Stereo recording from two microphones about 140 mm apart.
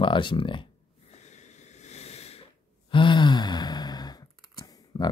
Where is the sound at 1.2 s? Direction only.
55° left (ahead or behind).